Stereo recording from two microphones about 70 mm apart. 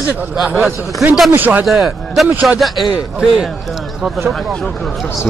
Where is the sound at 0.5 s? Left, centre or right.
Right.